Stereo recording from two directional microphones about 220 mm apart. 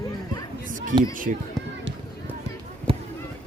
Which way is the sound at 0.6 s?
35° right (ahead or behind).